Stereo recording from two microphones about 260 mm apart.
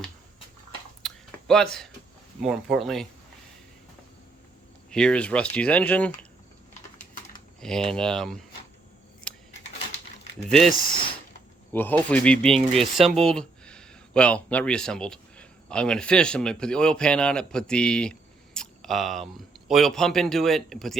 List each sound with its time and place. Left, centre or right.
1.0 s a sound: centre
2.4 s speech: centre
4.9 s speech: centre
7.0 s typing: left
7.6 s speech: centre
11.7 s speech: centre